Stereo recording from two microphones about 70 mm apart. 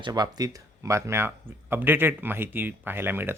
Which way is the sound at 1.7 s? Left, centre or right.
Right.